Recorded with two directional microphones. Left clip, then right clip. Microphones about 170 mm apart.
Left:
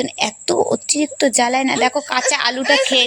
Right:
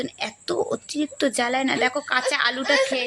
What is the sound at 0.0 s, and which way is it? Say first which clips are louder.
Speech: left 9 dB; 25° left (ahead or behind).